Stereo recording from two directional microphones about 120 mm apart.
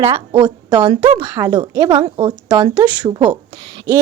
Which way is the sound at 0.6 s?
40° right (ahead or behind).